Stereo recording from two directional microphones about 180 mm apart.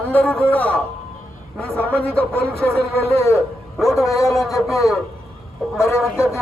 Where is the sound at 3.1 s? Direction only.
15° left (ahead or behind).